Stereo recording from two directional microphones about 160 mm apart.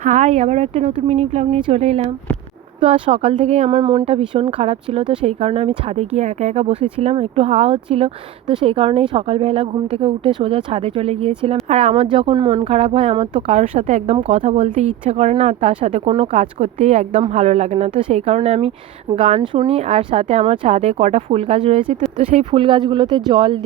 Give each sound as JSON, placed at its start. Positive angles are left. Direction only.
{"t": 0.0, "sound": "a woman's voice", "side_deg": -45}